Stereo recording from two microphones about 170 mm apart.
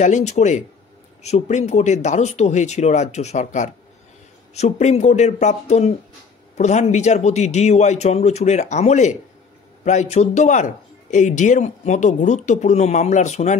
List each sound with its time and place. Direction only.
0.0 s a man's voice: 45° left (ahead or behind)